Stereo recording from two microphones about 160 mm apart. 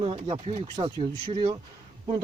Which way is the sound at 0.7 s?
30° right (ahead or behind).